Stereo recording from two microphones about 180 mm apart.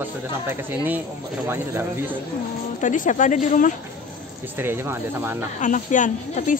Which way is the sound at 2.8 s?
45° left (ahead or behind).